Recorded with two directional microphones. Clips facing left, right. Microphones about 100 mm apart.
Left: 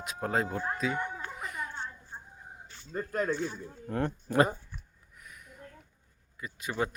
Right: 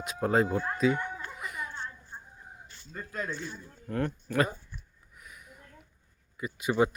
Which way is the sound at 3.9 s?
25° left (ahead or behind).